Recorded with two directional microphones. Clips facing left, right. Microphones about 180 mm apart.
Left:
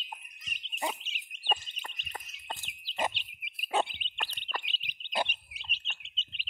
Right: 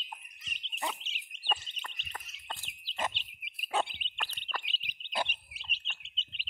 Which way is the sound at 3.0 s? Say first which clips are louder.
Left 3 dB; 10° left (ahead or behind).